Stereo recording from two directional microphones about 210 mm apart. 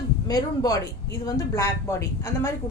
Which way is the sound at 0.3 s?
15° left (ahead or behind).